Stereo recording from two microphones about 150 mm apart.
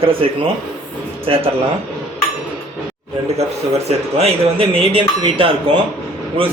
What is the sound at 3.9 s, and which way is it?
A man's voice, 40° right (ahead or behind).